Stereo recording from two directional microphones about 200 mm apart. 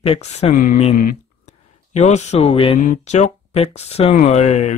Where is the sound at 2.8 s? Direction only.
40° left (ahead or behind).